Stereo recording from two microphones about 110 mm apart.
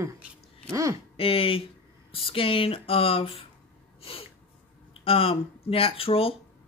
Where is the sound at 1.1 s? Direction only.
55° left (ahead or behind).